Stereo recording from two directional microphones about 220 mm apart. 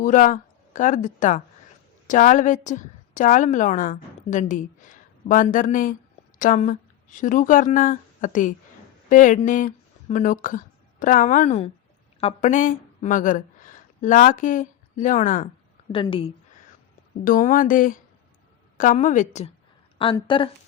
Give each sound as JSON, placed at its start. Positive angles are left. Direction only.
{"t": 0.0, "sound": "a woman's voice", "side_deg": 35}
{"t": 15.9, "sound": "a woman's voice", "side_deg": 25}
{"t": 17.2, "sound": "speech", "side_deg": 40}
{"t": 20.0, "sound": "a woman's voice", "side_deg": 20}